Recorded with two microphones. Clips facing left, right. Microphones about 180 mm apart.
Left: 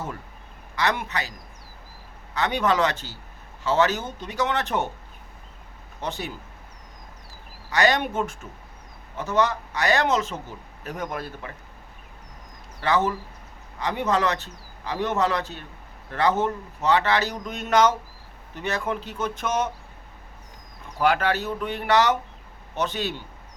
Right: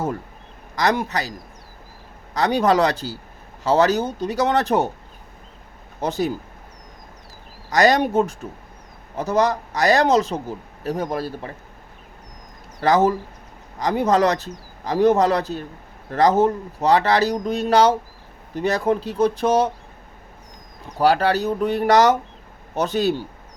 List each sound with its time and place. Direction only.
0.8 s speech: 40° right (ahead or behind)
2.3 s speech: 40° right (ahead or behind)
6.0 s speech: 40° right (ahead or behind)
7.7 s speech: 40° right (ahead or behind)
12.8 s speech: 40° right (ahead or behind)
20.8 s speech: 35° right (ahead or behind)